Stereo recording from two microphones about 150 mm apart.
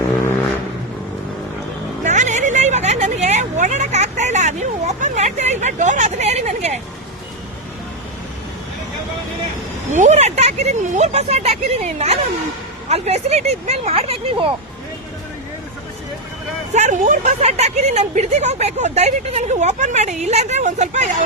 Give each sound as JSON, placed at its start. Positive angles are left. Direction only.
{"t": 2.0, "sound": "a sound", "side_deg": -55}
{"t": 9.9, "sound": "speech", "side_deg": -55}
{"t": 16.7, "sound": "speech", "side_deg": -55}